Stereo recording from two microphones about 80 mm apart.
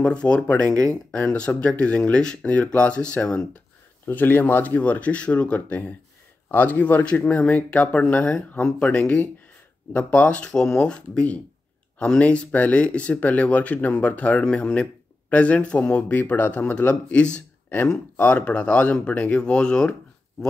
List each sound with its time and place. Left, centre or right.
0.0 s speech: centre
4.1 s speech: left